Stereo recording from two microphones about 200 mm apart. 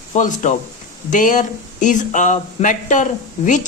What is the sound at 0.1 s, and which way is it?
Speech, 40° left (ahead or behind).